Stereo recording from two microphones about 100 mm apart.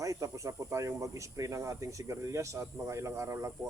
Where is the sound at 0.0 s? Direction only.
35° right (ahead or behind).